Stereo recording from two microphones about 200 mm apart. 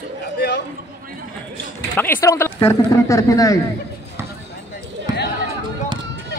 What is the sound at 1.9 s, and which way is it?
Speech, 10° left (ahead or behind).